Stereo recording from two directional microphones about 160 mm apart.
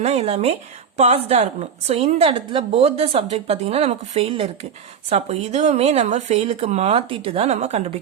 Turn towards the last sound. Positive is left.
turn(degrees=-40)  # may be behind; listen again after turning